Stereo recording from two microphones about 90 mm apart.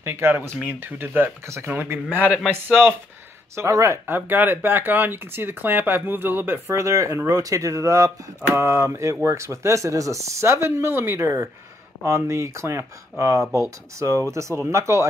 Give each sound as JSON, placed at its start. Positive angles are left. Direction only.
{"t": 0.0, "sound": "speech", "side_deg": -25}
{"t": 1.7, "sound": "speech", "side_deg": -20}
{"t": 4.0, "sound": "speech", "side_deg": -25}